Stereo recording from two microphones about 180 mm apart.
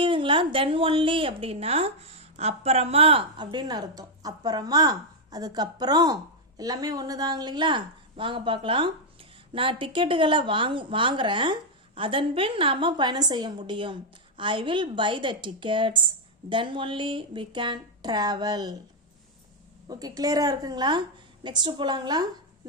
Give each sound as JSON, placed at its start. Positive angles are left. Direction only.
{"t": 0.0, "sound": "a woman's voice", "side_deg": -30}
{"t": 19.9, "sound": "a woman's voice", "side_deg": -20}